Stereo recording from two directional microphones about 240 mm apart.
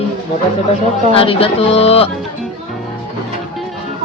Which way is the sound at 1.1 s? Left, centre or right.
Left.